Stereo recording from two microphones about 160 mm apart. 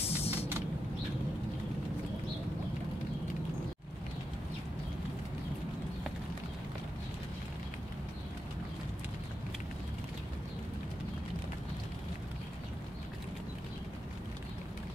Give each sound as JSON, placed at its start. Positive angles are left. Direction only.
{"t": 0.0, "sound": "vehicle", "side_deg": 40}